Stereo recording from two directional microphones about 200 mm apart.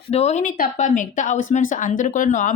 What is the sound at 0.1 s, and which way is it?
Speech, 35° left (ahead or behind).